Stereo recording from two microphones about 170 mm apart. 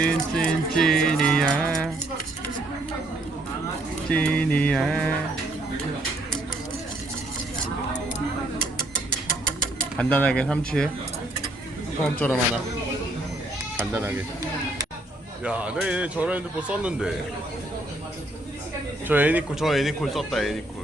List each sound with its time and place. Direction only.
0.0 s music: 5° left (ahead or behind)
4.1 s mantra: 5° left (ahead or behind)
10.0 s mantra: 10° left (ahead or behind)
12.0 s mantra: 10° left (ahead or behind)
13.7 s speech: 15° right (ahead or behind)
15.4 s speech: 5° right (ahead or behind)
19.0 s speech: 10° right (ahead or behind)